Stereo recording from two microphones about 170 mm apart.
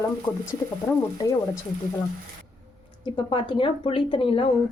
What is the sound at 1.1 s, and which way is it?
Speech, 20° left (ahead or behind).